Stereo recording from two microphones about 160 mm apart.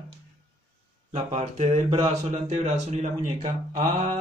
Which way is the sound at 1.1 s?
45° right (ahead or behind).